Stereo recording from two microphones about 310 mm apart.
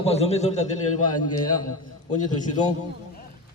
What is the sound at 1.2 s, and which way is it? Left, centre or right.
Speech, left.